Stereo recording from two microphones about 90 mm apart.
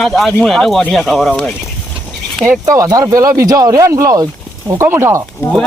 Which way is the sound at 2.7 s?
40° right (ahead or behind).